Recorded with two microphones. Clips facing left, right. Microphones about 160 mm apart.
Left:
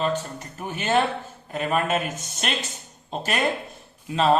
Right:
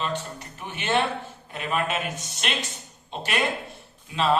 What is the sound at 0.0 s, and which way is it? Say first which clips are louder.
Speech: left 4 dB; 40° left (ahead or behind).